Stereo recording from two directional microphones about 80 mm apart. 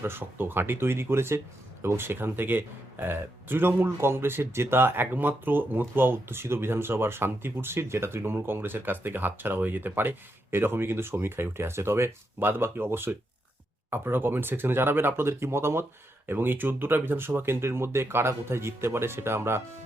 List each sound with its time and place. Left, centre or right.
0.0 s speech: right